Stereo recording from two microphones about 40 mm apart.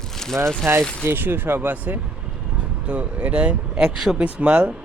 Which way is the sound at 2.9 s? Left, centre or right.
Right.